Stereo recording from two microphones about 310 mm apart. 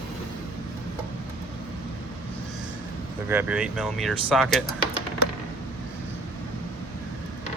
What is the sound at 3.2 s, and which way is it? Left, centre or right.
Speech, centre.